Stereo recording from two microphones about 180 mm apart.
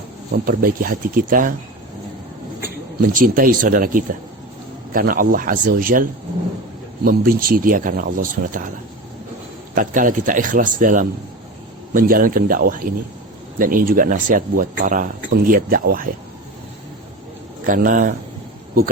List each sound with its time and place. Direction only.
0.3 s speech: 55° right (ahead or behind)
3.0 s speech: 50° right (ahead or behind)
9.7 s speech: 45° right (ahead or behind)
17.7 s speech: 50° right (ahead or behind)